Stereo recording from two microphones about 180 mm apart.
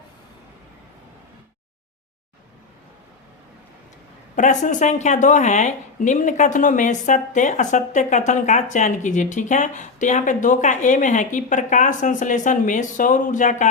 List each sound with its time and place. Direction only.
4.4 s speech: 45° left (ahead or behind)